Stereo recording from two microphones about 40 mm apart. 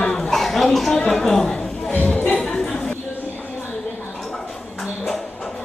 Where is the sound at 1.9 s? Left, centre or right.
Left.